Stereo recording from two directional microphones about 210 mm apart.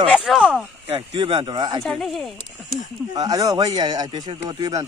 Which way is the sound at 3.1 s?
15° right (ahead or behind).